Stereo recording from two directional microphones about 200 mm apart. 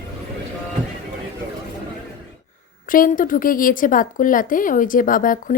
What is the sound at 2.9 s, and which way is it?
A woman's voice, 45° left (ahead or behind).